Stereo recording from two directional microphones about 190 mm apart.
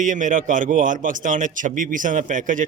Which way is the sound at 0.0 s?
45° right (ahead or behind).